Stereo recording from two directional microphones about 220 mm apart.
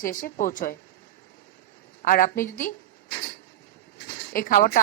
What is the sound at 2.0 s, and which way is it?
Speech, 40° left (ahead or behind).